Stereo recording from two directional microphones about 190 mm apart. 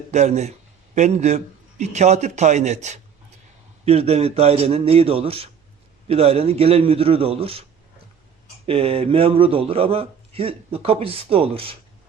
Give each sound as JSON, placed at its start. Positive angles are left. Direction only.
{"t": 0.1, "sound": "a man's voice", "side_deg": -35}
{"t": 8.6, "sound": "a man's voice", "side_deg": -30}